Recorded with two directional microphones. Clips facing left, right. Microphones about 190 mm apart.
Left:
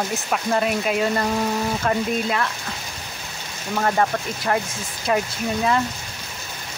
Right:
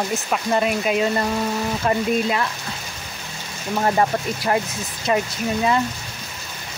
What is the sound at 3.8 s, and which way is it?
Speech, 15° right (ahead or behind).